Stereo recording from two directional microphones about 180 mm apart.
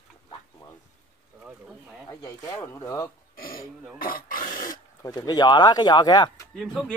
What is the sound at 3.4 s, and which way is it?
Speech, 55° left (ahead or behind).